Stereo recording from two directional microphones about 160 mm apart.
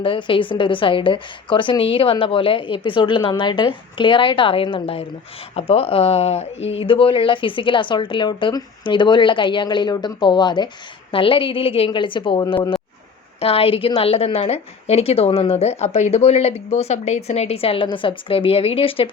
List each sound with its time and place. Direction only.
0.0 s a woman's voice: 30° left (ahead or behind)